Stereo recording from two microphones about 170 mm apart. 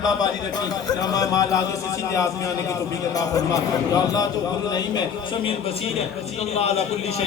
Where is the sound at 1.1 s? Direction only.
20° left (ahead or behind).